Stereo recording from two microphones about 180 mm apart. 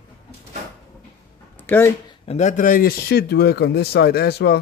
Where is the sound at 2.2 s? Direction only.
40° left (ahead or behind); by 4.6 s 65° left (ahead or behind).